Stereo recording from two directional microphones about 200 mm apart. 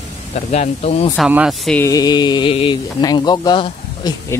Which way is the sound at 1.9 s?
20° left (ahead or behind).